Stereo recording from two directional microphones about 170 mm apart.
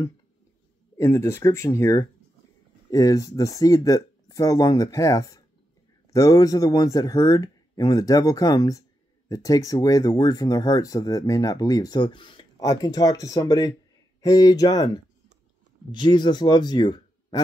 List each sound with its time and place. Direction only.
0.9 s speech: 15° left (ahead or behind)